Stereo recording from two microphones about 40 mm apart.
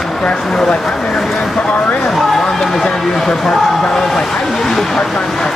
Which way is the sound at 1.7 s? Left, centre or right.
Left.